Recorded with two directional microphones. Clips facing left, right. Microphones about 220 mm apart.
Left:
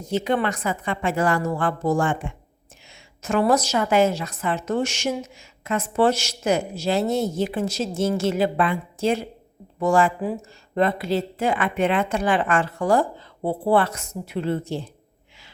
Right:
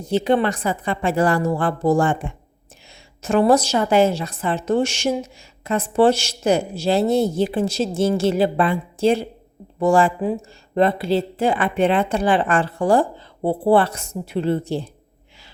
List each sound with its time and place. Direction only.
0.0 s a woman's voice: 30° right (ahead or behind)